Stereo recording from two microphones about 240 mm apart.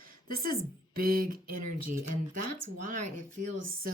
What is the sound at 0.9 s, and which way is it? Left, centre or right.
Speech, right.